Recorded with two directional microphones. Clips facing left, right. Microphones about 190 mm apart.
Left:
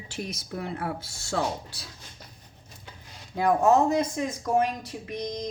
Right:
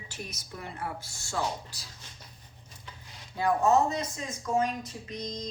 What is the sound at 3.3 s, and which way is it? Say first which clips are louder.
Speech: left 3 dB; 55° left (ahead or behind).